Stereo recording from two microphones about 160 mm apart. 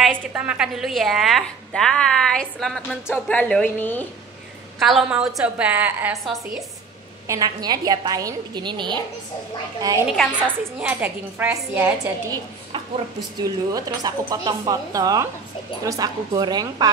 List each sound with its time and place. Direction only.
0.0 s a woman's voice: 10° right (ahead or behind); by 4.0 s 10° left (ahead or behind)
4.7 s a woman's voice: centre (ahead or behind)
7.2 s a woman's voice: 25° right (ahead or behind)
10.4 s a woman's voice: 10° right (ahead or behind)
12.3 s a woman's voice: 25° right (ahead or behind)